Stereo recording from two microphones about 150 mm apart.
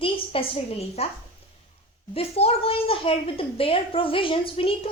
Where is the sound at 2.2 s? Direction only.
40° left (ahead or behind).